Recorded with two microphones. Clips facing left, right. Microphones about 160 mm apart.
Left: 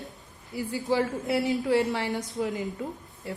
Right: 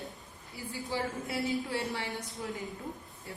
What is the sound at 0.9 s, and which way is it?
A woman's voice, 75° left (ahead or behind).